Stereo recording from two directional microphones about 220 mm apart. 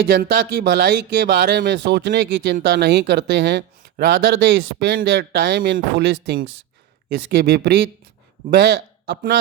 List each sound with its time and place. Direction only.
0.0 s speech: 50° right (ahead or behind)